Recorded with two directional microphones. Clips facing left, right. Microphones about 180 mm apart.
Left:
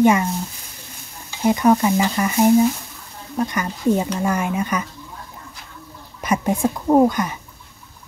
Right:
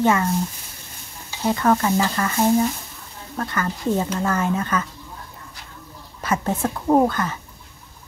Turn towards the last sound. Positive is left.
turn(degrees=15)  # may be behind; listen again after turning